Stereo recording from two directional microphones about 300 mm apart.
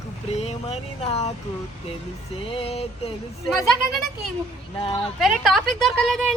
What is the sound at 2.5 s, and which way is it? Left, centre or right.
Speech, centre.